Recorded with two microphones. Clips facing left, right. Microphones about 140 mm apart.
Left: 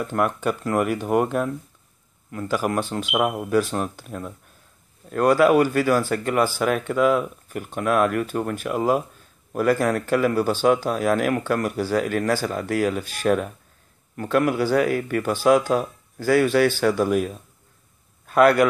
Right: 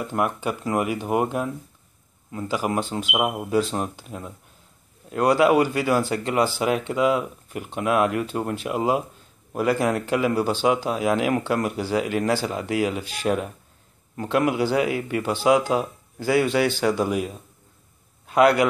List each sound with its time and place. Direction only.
0.0 s a man's voice: 15° right (ahead or behind)